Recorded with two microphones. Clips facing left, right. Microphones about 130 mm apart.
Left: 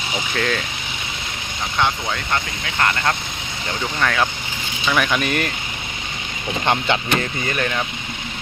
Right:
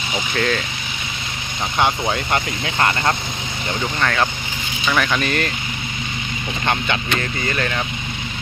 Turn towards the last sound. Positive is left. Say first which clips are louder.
# even
turn(degrees=5)  # may be behind; listen again after turning